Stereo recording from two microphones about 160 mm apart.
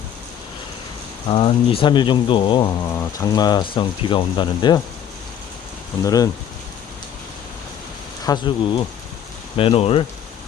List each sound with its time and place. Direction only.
1.3 s speech: 35° left (ahead or behind)
2.9 s speech: 20° left (ahead or behind)
6.1 s speech: 20° left (ahead or behind)
8.2 s speech: 25° left (ahead or behind)
9.6 s speech: 35° left (ahead or behind)